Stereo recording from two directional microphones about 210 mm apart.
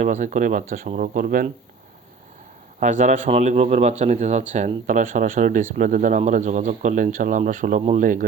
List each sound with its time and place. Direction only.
0.0 s speech: 35° right (ahead or behind)
2.8 s speech: 35° right (ahead or behind)